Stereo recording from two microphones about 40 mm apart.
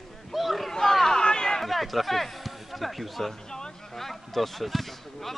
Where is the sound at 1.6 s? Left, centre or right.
Centre.